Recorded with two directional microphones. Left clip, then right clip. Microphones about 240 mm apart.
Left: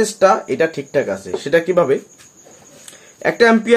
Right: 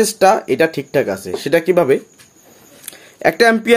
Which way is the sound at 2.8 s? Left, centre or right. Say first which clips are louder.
Right 5 dB; right.